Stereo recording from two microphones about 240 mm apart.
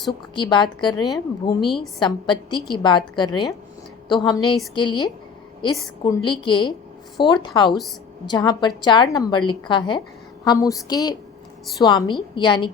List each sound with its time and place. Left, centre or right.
0.3 s a woman's voice: centre